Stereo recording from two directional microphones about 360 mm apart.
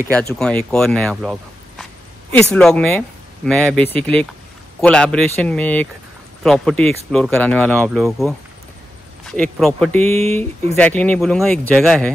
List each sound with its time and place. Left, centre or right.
0.1 s speech: centre